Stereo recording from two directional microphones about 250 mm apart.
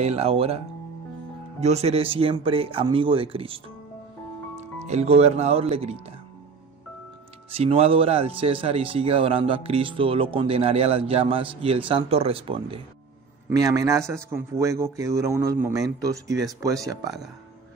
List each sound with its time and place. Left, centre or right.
0.0 s speech: right
1.6 s speech: right
7.5 s a man's voice: right